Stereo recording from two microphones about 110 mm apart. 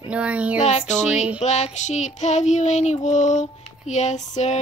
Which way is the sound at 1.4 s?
90° left.